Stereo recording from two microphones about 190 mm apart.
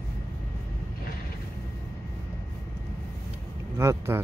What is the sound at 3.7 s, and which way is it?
Speech, 15° right (ahead or behind).